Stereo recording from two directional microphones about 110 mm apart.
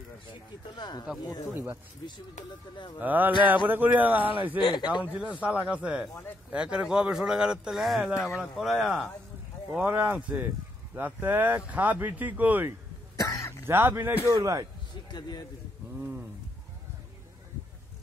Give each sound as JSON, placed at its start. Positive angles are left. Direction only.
{"t": 0.3, "sound": "speech", "side_deg": 40}
{"t": 1.5, "sound": "speech", "side_deg": -20}
{"t": 3.0, "sound": "speech", "side_deg": -15}
{"t": 4.6, "sound": "speech", "side_deg": 45}
{"t": 5.0, "sound": "speech", "side_deg": -10}
{"t": 9.7, "sound": "speech", "side_deg": -15}
{"t": 13.1, "sound": "cough", "side_deg": 30}
{"t": 13.7, "sound": "speech", "side_deg": -20}
{"t": 15.0, "sound": "a man's voice", "side_deg": 40}